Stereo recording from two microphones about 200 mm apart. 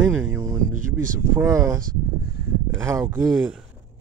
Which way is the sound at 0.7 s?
40° right (ahead or behind).